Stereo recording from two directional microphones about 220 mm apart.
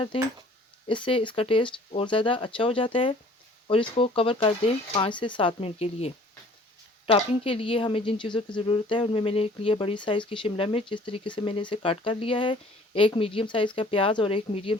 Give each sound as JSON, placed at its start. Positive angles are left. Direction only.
{"t": 0.1, "sound": "a woman's voice", "side_deg": 25}